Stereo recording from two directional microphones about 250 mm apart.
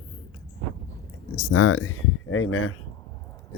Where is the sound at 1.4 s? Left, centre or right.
Left.